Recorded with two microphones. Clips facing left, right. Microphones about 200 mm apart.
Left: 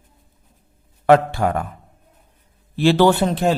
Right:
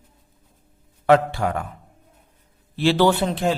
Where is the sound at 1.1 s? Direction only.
50° left (ahead or behind).